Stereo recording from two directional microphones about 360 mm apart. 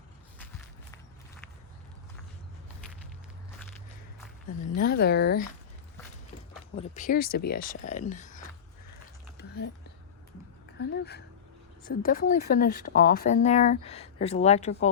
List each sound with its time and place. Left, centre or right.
4.6 s speech: left
6.7 s speech: centre
10.8 s speech: left